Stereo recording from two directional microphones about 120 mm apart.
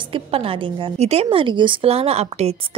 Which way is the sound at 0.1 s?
50° right (ahead or behind).